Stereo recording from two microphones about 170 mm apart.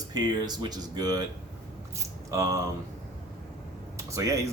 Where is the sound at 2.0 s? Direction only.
20° right (ahead or behind).